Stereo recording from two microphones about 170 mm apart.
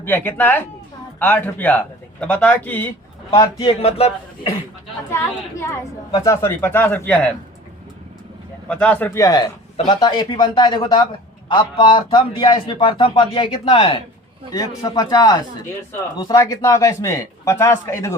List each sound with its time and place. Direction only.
0.0 s speech: 10° left (ahead or behind)
3.3 s speech: 30° left (ahead or behind)
5.1 s speech: 15° left (ahead or behind)
8.6 s speech: 10° left (ahead or behind)
9.7 s speech: 35° left (ahead or behind)
10.0 s a man's voice: 25° left (ahead or behind)